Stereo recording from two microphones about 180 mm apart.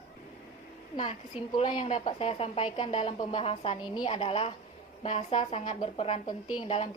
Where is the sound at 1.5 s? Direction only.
30° left (ahead or behind).